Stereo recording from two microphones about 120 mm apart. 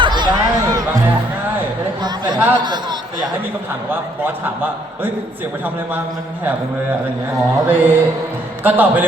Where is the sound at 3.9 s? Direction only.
15° right (ahead or behind).